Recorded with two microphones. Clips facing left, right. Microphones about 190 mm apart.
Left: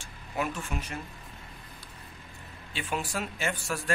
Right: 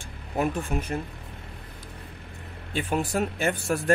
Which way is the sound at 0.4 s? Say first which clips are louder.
Right 6 dB; 55° right (ahead or behind).